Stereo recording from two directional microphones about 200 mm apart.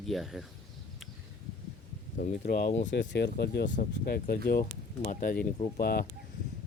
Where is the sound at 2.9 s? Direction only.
60° left (ahead or behind).